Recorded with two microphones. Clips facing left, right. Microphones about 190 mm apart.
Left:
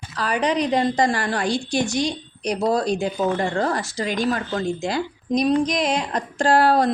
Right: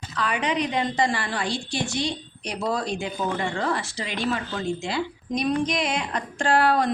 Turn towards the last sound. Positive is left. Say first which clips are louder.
# left 4 dB
turn(degrees=35)  # may be behind; listen again after turning